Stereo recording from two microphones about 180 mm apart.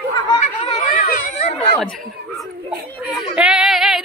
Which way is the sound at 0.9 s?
45° left (ahead or behind).